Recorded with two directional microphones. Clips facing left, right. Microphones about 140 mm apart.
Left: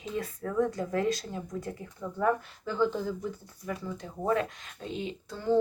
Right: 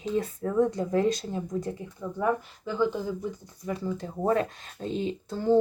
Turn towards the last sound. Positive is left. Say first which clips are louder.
# right 4 dB
turn(degrees=-35)  # may be behind; listen again after turning